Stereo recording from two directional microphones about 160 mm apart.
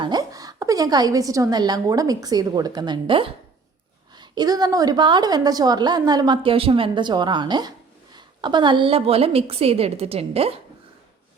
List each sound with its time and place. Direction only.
0.0 s a woman's voice: 25° right (ahead or behind)